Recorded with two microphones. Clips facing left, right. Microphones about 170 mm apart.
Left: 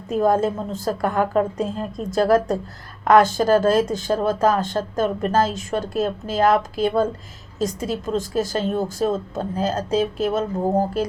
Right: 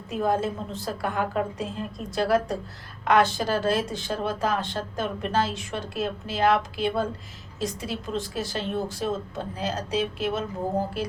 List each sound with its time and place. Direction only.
0.1 s speech: 45° left (ahead or behind)